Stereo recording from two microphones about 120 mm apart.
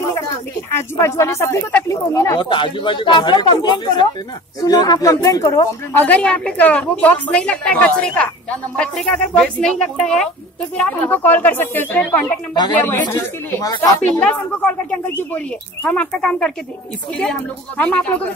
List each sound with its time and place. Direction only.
0.7 s speech: 25° left (ahead or behind)
2.3 s speech: 40° left (ahead or behind)
5.9 s speech: 10° left (ahead or behind)
13.1 s speech: 30° left (ahead or behind)
14.2 s speech: 10° left (ahead or behind)